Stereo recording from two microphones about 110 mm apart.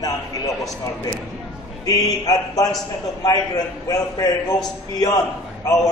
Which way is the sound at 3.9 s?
35° left (ahead or behind).